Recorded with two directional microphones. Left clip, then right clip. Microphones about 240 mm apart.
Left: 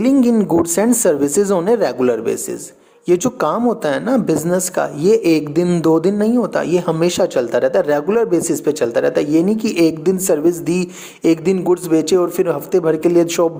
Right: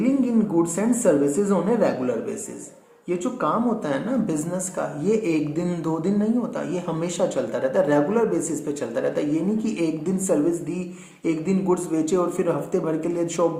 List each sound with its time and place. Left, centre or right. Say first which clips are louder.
0.8 s speech: left 4 dB; left